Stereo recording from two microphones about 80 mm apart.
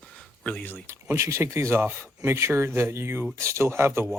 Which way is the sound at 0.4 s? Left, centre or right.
Centre.